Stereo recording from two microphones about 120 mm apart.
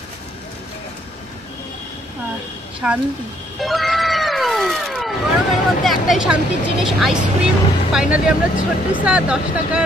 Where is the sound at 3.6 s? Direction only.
Centre (ahead or behind).